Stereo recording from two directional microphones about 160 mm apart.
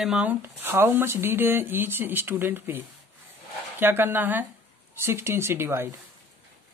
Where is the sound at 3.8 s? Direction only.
15° right (ahead or behind).